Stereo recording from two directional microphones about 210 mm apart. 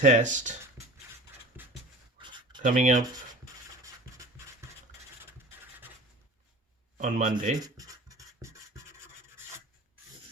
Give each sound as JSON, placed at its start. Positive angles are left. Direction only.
{"t": 0.0, "sound": "a man's voice", "side_deg": -35}
{"t": 1.5, "sound": "a sound", "side_deg": -10}
{"t": 2.1, "sound": "writing", "side_deg": -20}
{"t": 2.6, "sound": "a man's voice", "side_deg": -40}
{"t": 6.9, "sound": "a man's voice", "side_deg": -35}
{"t": 7.6, "sound": "a sound", "side_deg": -15}